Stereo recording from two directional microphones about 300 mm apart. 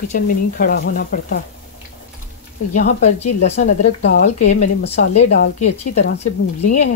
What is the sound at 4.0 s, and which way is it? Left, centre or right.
Speech, left.